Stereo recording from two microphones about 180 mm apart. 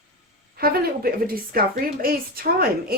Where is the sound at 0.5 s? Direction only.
55° right (ahead or behind).